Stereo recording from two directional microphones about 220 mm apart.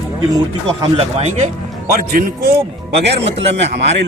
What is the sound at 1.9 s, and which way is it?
Speech, 40° right (ahead or behind).